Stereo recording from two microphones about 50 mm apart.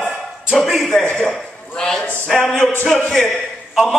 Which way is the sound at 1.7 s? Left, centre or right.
Centre.